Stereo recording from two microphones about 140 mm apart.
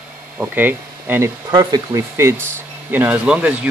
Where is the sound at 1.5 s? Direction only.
30° right (ahead or behind).